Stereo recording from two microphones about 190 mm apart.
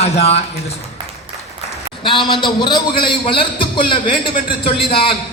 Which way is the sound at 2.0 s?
25° left (ahead or behind).